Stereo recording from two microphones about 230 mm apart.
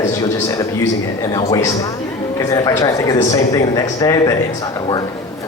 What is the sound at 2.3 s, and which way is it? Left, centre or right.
Speech, centre.